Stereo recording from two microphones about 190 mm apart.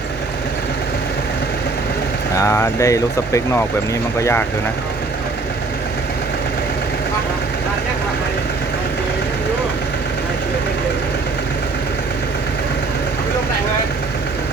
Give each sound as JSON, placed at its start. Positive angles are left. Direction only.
{"t": 2.4, "sound": "speech", "side_deg": 15}